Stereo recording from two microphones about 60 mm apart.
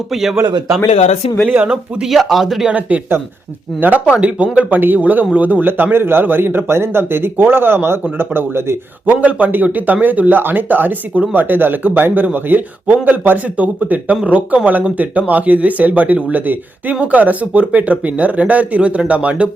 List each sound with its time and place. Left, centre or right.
0.1 s speech: centre
1.5 s speech: right
1.7 s speech: centre
2.6 s a man's voice: right
9.0 s a man's voice: right